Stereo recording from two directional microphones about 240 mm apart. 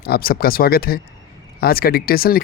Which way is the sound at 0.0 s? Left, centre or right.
Left.